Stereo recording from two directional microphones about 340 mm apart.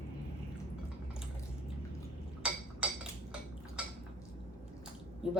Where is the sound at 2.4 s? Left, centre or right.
Centre.